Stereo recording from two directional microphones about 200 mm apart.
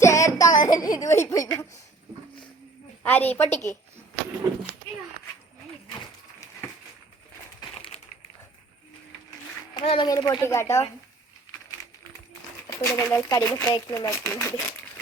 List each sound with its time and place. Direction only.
0.0 s child singing: 15° left (ahead or behind)
1.1 s a sound: 15° left (ahead or behind)
3.0 s a child's voice: 10° left (ahead or behind)
7.8 s a sound: 30° left (ahead or behind)
9.7 s a child's voice: 25° left (ahead or behind)
12.6 s a child's voice: 15° left (ahead or behind)